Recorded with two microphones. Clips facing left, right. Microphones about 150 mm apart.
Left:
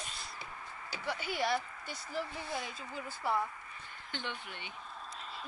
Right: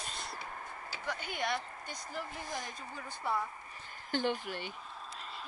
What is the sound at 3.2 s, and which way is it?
Speech, 5° left (ahead or behind).